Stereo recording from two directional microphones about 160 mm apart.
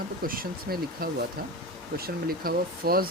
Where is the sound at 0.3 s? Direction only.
65° right (ahead or behind).